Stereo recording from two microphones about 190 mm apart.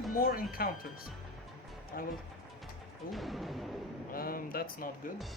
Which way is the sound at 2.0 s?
50° left (ahead or behind).